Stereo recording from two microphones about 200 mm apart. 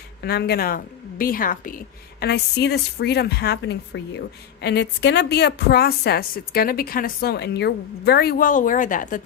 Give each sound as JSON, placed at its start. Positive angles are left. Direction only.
{"t": 0.2, "sound": "a woman's voice", "side_deg": 55}
{"t": 2.2, "sound": "a woman's voice", "side_deg": 55}